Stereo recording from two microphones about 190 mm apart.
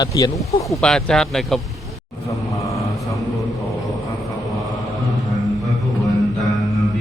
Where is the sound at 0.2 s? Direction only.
20° left (ahead or behind).